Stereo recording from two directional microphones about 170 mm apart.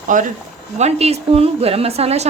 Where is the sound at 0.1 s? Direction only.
50° right (ahead or behind).